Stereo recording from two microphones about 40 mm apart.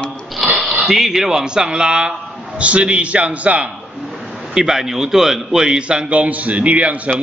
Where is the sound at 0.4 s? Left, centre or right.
Centre.